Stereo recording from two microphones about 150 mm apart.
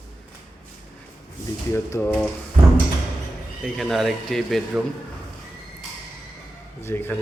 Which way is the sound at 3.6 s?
Centre (ahead or behind).